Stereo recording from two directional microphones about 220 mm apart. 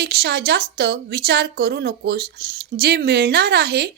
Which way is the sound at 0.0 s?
45° right (ahead or behind).